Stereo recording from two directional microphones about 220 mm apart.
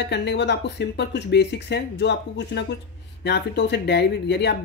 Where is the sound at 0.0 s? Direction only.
50° left (ahead or behind).